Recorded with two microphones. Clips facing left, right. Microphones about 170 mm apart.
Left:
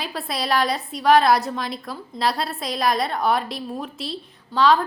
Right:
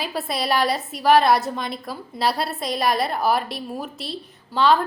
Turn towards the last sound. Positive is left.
turn(degrees=0)  # may be behind; listen again after turning